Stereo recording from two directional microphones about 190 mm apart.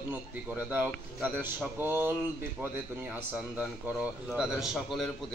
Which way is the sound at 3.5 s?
5° right (ahead or behind).